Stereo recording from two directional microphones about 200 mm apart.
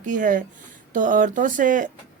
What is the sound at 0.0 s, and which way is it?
A woman's voice, 40° right (ahead or behind).